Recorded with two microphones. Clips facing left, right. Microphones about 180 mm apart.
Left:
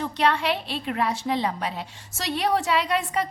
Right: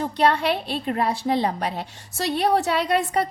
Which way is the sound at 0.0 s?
45° right (ahead or behind).